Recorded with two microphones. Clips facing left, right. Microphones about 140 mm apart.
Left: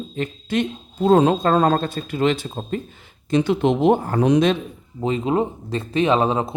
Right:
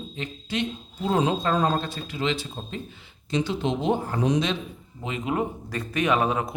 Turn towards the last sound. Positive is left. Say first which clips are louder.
# left 5 dB
turn(degrees=30)  # may be behind; listen again after turning